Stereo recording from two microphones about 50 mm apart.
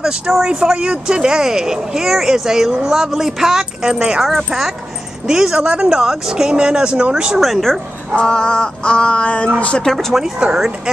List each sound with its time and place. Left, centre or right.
0.0 s speech: centre
4.2 s a woman's voice: centre
7.3 s a woman's voice: centre
8.2 s a sound: centre
10.1 s a woman's voice: centre